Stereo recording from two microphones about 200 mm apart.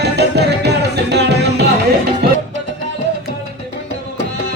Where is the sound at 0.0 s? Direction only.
55° right (ahead or behind).